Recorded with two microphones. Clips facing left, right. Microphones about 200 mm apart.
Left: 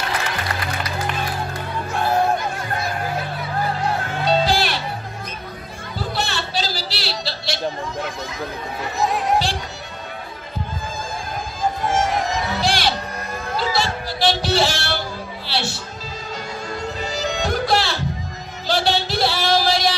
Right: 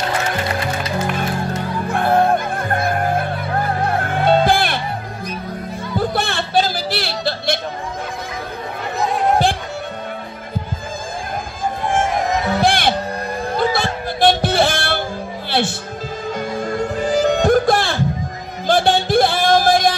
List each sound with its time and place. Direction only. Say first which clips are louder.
1.9 s music: right 4 dB; 55° right (ahead or behind)
5.9 s a sound: right 5 dB; 55° right (ahead or behind)
11.9 s music: right 6 dB; 55° right (ahead or behind)